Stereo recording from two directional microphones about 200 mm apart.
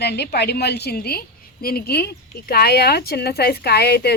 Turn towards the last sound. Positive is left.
turn(degrees=55)  # may be behind; listen again after turning